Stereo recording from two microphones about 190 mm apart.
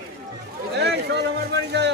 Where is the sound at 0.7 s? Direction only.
60° right (ahead or behind).